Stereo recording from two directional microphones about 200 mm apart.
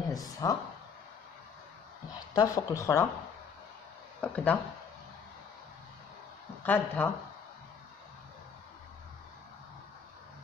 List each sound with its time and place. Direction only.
0.1 s speech: 20° left (ahead or behind)
2.3 s speech: 15° left (ahead or behind)
4.2 s speech: 10° left (ahead or behind)
6.6 s speech: 10° left (ahead or behind)